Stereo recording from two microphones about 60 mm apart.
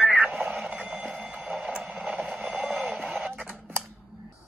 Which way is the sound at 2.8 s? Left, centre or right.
Centre.